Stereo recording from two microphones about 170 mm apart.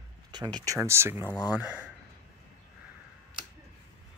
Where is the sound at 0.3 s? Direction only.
25° right (ahead or behind); by 1.9 s 10° right (ahead or behind).